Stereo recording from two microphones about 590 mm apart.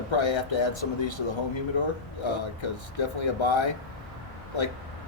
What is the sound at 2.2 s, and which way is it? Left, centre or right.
Speech, left.